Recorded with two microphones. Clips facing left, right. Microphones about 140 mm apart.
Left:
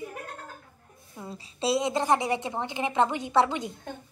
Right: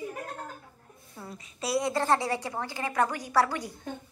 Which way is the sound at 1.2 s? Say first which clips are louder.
Left 5 dB; 25° left (ahead or behind).